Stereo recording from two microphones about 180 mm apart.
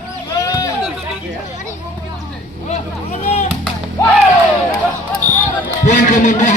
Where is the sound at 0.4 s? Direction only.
20° left (ahead or behind).